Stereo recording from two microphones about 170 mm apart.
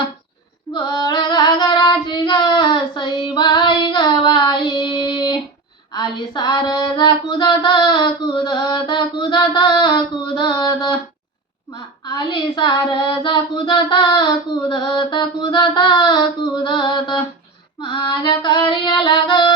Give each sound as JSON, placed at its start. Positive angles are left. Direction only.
{"t": 0.7, "sound": "child singing", "side_deg": 25}
{"t": 11.7, "sound": "speech", "side_deg": 25}